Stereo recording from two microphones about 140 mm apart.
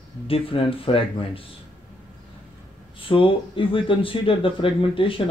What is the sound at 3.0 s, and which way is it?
Speech, 40° left (ahead or behind).